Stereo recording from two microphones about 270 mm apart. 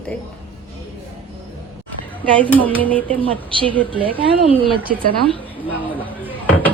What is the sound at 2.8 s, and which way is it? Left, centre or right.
Speech, centre.